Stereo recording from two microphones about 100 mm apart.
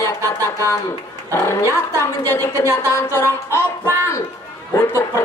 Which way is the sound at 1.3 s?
25° left (ahead or behind).